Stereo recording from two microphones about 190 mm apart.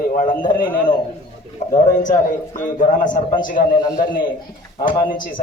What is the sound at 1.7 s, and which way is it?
A man's voice, 40° left (ahead or behind).